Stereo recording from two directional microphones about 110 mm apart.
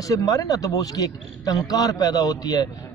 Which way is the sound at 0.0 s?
35° left (ahead or behind).